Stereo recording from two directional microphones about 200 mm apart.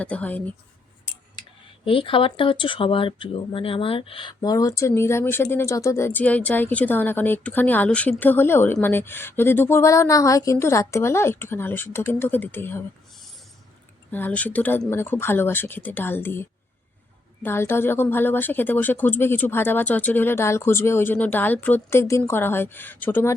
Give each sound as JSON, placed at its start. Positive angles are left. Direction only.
{"t": 0.0, "sound": "a woman's voice", "side_deg": 5}
{"t": 1.4, "sound": "a woman's voice", "side_deg": 25}
{"t": 14.1, "sound": "a woman's voice", "side_deg": 10}